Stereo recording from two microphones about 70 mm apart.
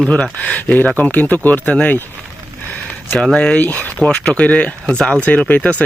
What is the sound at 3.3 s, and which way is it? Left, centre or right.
Speech, centre.